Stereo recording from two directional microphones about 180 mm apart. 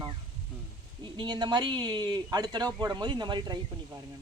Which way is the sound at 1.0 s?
25° right (ahead or behind).